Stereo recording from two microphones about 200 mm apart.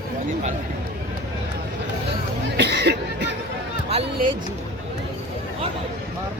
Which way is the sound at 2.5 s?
55° right (ahead or behind).